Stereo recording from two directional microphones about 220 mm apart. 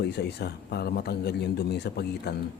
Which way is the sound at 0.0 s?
50° left (ahead or behind).